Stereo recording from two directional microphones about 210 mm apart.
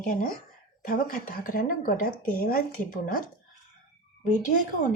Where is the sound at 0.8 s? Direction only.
40° left (ahead or behind).